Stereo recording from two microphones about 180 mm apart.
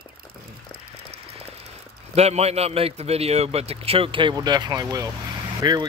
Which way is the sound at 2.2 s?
35° right (ahead or behind).